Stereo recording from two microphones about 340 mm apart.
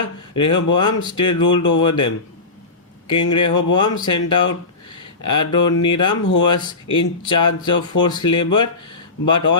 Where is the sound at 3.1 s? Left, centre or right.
Left.